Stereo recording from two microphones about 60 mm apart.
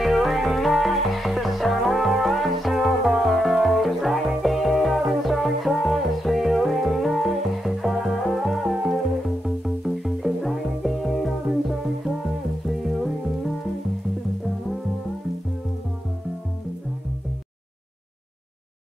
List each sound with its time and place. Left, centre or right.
0.0 s music: centre
12.6 s music: centre